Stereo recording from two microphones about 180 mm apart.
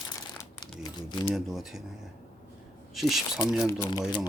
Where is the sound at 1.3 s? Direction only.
Centre (ahead or behind).